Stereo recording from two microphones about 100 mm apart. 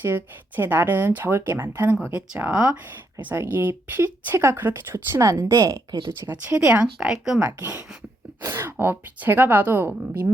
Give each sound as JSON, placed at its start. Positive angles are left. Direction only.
{"t": 0.0, "sound": "speech", "side_deg": -20}
{"t": 5.3, "sound": "a woman's voice", "side_deg": -35}
{"t": 6.5, "sound": "speech", "side_deg": -10}
{"t": 8.4, "sound": "speech", "side_deg": -25}